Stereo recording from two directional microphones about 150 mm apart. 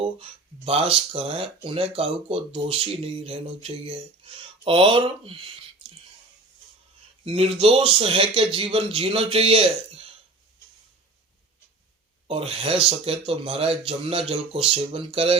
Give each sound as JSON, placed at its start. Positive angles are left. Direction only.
{"t": 0.0, "sound": "speech", "side_deg": -40}
{"t": 7.3, "sound": "speech", "side_deg": -40}
{"t": 12.3, "sound": "speech", "side_deg": -40}